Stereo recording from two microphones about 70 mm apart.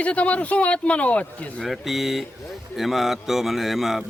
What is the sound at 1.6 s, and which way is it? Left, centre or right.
A man's voice, centre.